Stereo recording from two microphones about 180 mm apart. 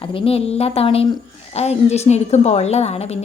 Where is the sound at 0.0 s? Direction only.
30° left (ahead or behind).